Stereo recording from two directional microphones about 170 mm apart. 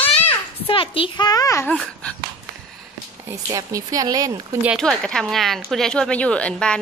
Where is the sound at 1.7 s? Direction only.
5° left (ahead or behind).